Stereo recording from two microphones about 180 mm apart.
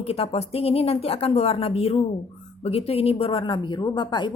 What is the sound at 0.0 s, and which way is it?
A woman's voice, 35° left (ahead or behind).